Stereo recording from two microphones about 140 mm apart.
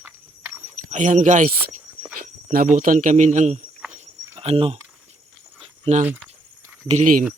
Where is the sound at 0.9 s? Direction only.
60° right (ahead or behind).